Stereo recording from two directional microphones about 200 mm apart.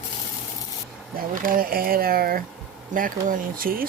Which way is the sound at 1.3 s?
45° right (ahead or behind).